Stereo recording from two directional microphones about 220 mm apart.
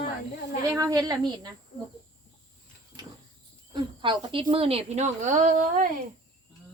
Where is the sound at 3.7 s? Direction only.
20° right (ahead or behind); by 5.9 s 40° right (ahead or behind).